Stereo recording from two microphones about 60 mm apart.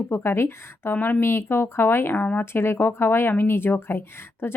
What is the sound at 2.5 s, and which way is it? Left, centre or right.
Speech, left.